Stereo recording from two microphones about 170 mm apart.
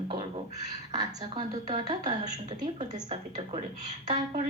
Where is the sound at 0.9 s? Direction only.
25° right (ahead or behind).